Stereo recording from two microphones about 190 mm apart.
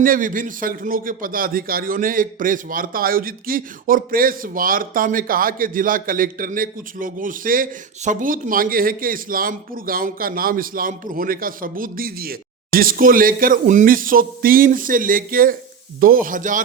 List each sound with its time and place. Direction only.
0.0 s a man's voice: 45° right (ahead or behind)